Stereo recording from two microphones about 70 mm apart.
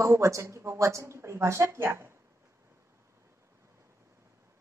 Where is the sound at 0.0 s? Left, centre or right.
Right.